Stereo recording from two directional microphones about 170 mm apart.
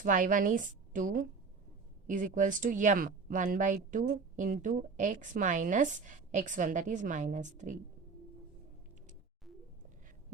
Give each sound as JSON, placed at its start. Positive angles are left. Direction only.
{"t": 0.0, "sound": "speech", "side_deg": -50}